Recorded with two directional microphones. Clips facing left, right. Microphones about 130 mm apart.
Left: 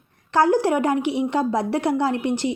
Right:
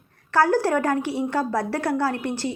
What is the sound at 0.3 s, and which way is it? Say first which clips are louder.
A woman's voice: left 2 dB; 20° left (ahead or behind).